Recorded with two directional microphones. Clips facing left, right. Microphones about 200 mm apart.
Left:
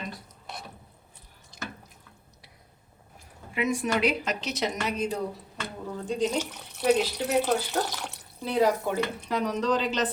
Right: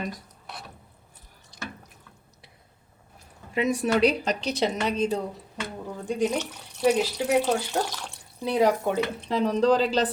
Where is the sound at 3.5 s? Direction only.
35° right (ahead or behind).